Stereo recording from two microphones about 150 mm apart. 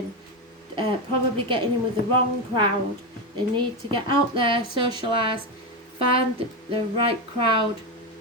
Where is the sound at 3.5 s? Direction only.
30° right (ahead or behind).